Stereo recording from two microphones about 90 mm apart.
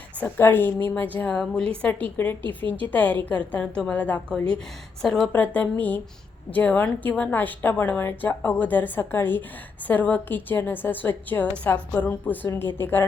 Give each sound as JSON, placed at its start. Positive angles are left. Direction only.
{"t": 0.3, "sound": "a woman's voice", "side_deg": 25}
{"t": 5.3, "sound": "a woman's voice", "side_deg": 15}